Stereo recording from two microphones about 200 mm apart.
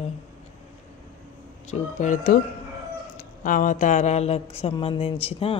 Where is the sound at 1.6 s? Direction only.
40° left (ahead or behind).